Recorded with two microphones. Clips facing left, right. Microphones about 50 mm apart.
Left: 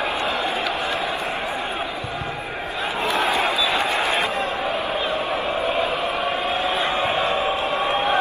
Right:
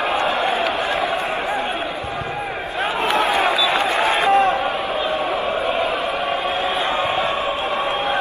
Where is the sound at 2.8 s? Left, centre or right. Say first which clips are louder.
Right 4 dB; right.